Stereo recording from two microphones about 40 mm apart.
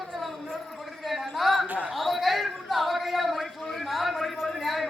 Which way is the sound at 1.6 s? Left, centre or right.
Right.